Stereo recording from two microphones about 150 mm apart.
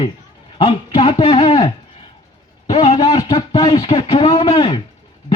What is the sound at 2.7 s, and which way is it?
A man's voice, 45° left (ahead or behind).